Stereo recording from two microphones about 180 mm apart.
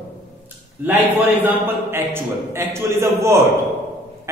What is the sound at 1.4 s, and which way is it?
A man's voice, 15° right (ahead or behind).